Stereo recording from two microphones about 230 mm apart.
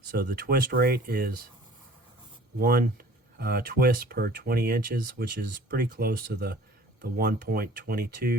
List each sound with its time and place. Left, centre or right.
0.2 s speech: right
2.6 s speech: right